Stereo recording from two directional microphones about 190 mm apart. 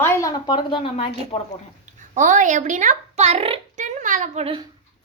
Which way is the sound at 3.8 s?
40° right (ahead or behind).